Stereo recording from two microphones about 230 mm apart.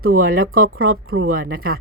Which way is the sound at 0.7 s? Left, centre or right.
Right.